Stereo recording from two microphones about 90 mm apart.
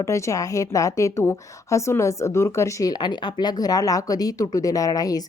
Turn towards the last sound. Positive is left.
turn(degrees=45)  # may be behind; listen again after turning